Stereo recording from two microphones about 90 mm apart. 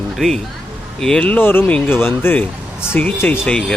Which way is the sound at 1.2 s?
20° left (ahead or behind).